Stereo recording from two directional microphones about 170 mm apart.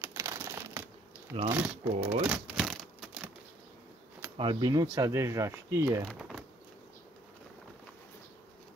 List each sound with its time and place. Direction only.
0.0 s crumpling: 15° right (ahead or behind)
1.5 s speech: 10° right (ahead or behind)
2.2 s crumpling: centre (ahead or behind)
4.4 s speech: 25° right (ahead or behind)
6.0 s speech: centre (ahead or behind)